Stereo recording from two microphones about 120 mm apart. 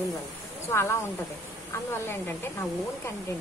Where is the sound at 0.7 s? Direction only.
20° left (ahead or behind).